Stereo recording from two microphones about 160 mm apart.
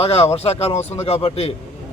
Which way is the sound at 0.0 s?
35° left (ahead or behind).